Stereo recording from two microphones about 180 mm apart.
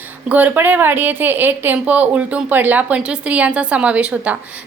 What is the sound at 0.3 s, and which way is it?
Speech, 10° right (ahead or behind).